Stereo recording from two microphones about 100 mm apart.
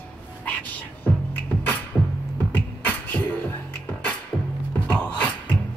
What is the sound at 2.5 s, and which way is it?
Music, 15° left (ahead or behind).